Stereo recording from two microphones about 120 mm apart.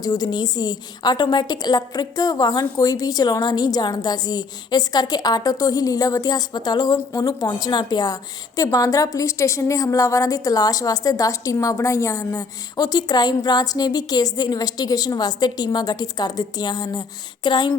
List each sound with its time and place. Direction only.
0.0 s a woman's voice: 30° left (ahead or behind)